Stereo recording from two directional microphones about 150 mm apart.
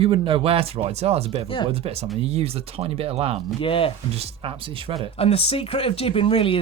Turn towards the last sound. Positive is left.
turn(degrees=35)  # may be behind; listen again after turning